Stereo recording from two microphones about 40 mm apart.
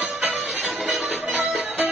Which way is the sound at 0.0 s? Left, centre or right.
Right.